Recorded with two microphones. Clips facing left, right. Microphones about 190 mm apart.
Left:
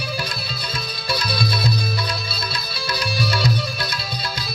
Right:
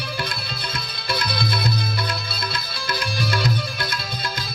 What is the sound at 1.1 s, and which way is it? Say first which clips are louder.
Music: left 1 dB; 55° right (ahead or behind).